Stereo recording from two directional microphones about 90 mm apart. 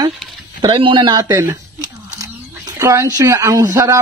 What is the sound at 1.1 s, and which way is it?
Speech, 40° right (ahead or behind).